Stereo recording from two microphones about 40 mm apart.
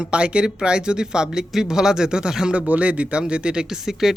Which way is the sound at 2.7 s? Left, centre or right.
Right.